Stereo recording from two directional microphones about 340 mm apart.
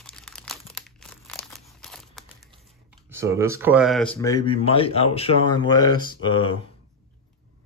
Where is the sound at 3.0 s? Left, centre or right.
Centre.